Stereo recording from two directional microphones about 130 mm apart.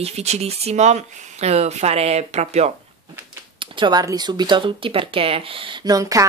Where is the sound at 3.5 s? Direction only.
40° right (ahead or behind).